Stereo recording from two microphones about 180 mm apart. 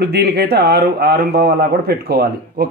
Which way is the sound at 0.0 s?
65° right (ahead or behind).